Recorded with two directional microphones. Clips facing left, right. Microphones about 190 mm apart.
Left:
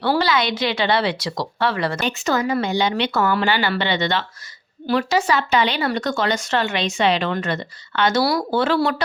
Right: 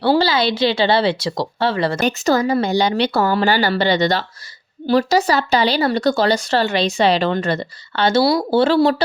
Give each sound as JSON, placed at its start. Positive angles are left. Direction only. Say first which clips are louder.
{"t": 0.0, "sound": "speech", "louder": "right 4 dB", "side_deg": -30}
{"t": 2.0, "sound": "speech", "louder": "right 5 dB", "side_deg": -40}